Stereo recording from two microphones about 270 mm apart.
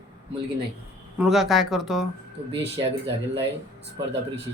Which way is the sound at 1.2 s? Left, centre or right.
Centre.